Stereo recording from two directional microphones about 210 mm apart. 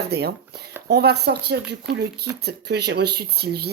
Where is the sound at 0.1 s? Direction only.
50° right (ahead or behind).